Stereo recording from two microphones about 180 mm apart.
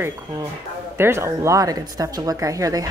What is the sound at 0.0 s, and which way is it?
Speech, 20° right (ahead or behind).